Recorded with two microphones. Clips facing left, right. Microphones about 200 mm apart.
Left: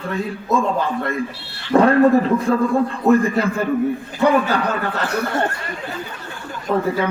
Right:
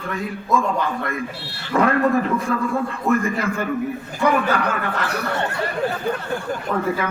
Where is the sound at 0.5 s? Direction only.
30° left (ahead or behind).